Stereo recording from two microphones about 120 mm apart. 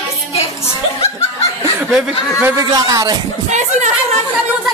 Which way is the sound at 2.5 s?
30° right (ahead or behind).